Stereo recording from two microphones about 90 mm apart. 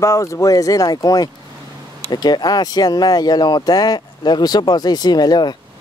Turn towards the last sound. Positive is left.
turn(degrees=50)  # may be behind; listen again after turning